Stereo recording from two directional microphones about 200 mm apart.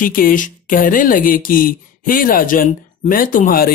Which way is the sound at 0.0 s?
45° left (ahead or behind).